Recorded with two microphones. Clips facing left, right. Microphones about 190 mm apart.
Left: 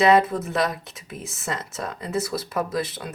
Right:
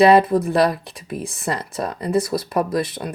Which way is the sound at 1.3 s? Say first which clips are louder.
Right 4 dB; 60° right (ahead or behind).